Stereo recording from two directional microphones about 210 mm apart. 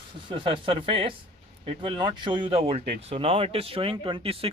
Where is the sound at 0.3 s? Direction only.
25° right (ahead or behind).